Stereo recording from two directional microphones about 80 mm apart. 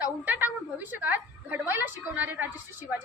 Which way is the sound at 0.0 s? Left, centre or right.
Right.